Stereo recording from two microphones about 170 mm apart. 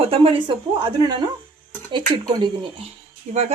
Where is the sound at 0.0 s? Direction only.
35° right (ahead or behind).